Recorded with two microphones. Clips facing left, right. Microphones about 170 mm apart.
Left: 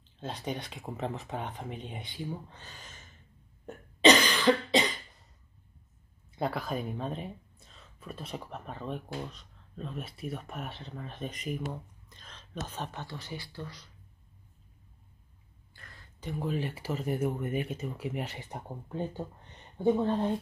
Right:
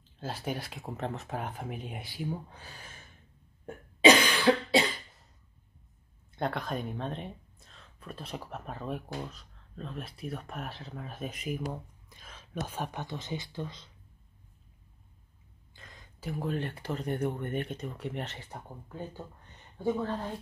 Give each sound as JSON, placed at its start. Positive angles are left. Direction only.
{"t": 0.2, "sound": "speech", "side_deg": -5}
{"t": 3.6, "sound": "cough", "side_deg": -10}
{"t": 6.3, "sound": "speech", "side_deg": 5}
{"t": 15.7, "sound": "a sound", "side_deg": -20}
{"t": 16.2, "sound": "speech", "side_deg": 0}